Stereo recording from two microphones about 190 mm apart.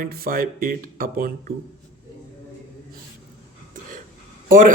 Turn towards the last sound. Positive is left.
turn(degrees=-45)  # may be behind; listen again after turning